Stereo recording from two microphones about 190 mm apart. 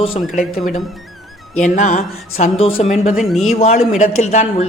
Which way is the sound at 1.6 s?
40° left (ahead or behind).